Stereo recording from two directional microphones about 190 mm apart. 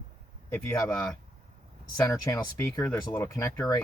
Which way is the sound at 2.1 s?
15° left (ahead or behind).